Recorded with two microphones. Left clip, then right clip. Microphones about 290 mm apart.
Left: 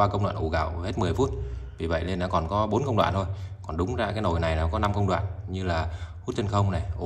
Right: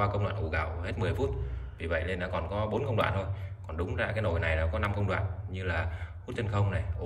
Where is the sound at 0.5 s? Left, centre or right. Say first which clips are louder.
Left 6 dB; centre.